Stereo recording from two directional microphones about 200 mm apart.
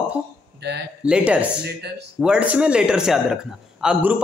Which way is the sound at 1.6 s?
55° right (ahead or behind).